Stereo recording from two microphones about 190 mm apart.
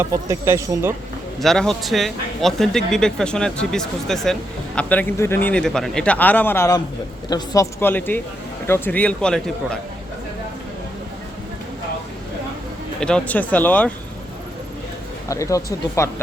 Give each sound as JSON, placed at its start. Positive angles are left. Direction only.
{"t": 0.0, "sound": "speech", "side_deg": -15}
{"t": 1.4, "sound": "speech", "side_deg": 0}
{"t": 13.0, "sound": "speech", "side_deg": 5}
{"t": 15.3, "sound": "speech", "side_deg": 15}